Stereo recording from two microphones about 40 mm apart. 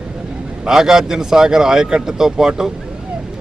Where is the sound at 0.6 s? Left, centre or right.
Centre.